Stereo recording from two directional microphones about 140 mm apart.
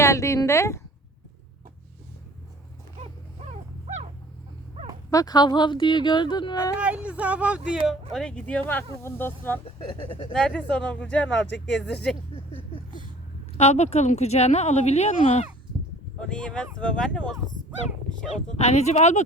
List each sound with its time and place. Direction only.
0.0 s speech: 20° left (ahead or behind)
5.1 s speech: 30° left (ahead or behind)
6.7 s speech: 10° right (ahead or behind)
8.1 s speech: 5° left (ahead or behind)
12.3 s a sound: 45° left (ahead or behind)
13.6 s speech: 50° left (ahead or behind)
16.3 s speech: 5° left (ahead or behind)
18.6 s speech: 50° left (ahead or behind)